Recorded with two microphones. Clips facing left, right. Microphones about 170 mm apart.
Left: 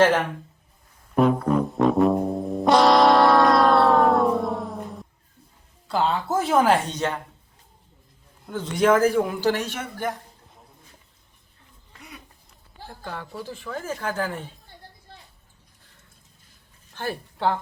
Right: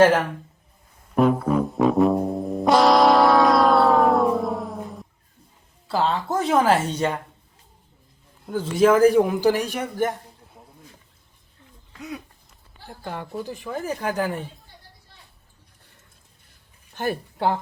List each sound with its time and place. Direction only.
1.1 s music: centre (ahead or behind)
5.9 s speech: centre (ahead or behind)
8.4 s speech: 5° right (ahead or behind)
11.9 s a sound: 90° right
13.0 s speech: 15° right (ahead or behind)
16.9 s speech: 15° right (ahead or behind)